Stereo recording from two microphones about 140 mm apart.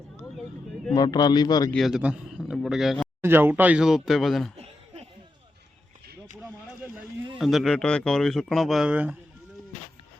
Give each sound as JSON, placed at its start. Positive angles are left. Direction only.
{"t": 0.9, "sound": "a man's voice", "side_deg": 30}
{"t": 1.7, "sound": "a man's voice", "side_deg": 0}
{"t": 3.2, "sound": "speech", "side_deg": -15}
{"t": 4.5, "sound": "chuckle", "side_deg": -50}
{"t": 7.3, "sound": "speech", "side_deg": 0}